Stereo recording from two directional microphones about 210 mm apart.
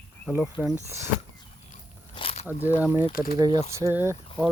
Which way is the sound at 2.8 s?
10° right (ahead or behind).